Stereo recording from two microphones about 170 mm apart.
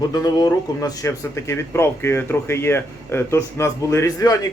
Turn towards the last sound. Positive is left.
turn(degrees=20)  # may be behind; listen again after turning